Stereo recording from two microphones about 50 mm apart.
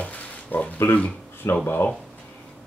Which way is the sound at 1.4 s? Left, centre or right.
Left.